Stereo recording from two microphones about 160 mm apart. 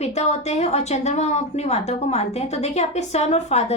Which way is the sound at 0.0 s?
45° left (ahead or behind).